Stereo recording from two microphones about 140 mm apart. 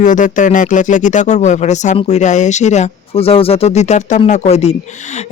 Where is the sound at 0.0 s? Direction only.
65° left (ahead or behind).